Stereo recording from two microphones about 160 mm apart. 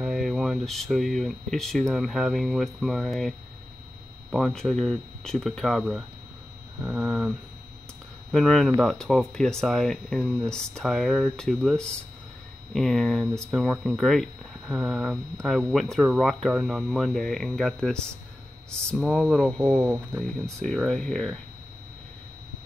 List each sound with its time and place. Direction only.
0.0 s speech: centre (ahead or behind)
19.8 s speech: 10° right (ahead or behind)
20.6 s speech: centre (ahead or behind)